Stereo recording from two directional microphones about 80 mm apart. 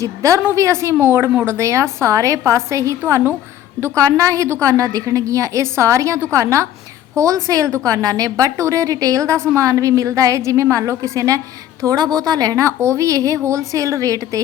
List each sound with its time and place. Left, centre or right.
0.0 s a woman's voice: right
3.9 s a woman's voice: right
11.9 s a woman's voice: right